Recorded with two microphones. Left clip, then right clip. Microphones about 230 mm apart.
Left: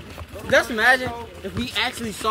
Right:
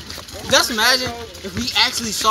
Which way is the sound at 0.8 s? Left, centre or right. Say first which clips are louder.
Right 1 dB; right.